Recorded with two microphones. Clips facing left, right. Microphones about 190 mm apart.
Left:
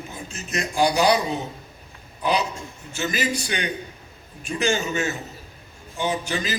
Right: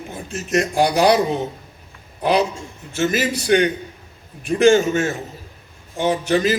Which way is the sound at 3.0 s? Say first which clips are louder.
Right 6 dB; 55° right (ahead or behind).